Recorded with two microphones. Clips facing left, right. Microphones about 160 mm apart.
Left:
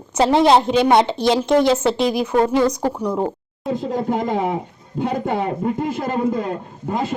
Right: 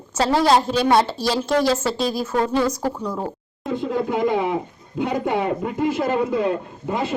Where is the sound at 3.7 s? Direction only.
40° left (ahead or behind).